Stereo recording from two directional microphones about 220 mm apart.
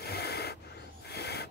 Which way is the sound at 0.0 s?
45° left (ahead or behind).